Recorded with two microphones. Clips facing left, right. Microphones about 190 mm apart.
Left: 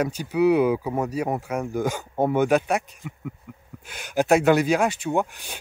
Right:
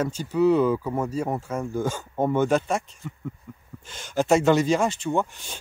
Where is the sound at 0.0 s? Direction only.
15° left (ahead or behind).